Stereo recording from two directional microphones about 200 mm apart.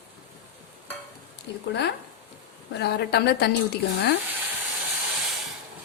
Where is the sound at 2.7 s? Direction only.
55° left (ahead or behind).